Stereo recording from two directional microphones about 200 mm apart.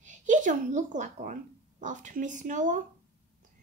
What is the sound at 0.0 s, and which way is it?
A woman's voice, 40° right (ahead or behind).